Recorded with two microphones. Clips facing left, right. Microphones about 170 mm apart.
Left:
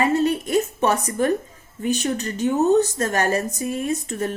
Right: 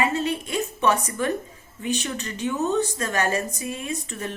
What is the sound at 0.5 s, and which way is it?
A woman's voice, 35° left (ahead or behind).